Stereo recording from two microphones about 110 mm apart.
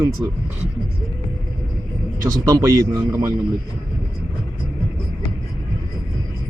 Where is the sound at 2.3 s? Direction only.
30° right (ahead or behind).